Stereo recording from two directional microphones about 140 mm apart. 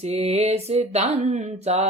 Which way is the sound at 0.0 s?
50° right (ahead or behind).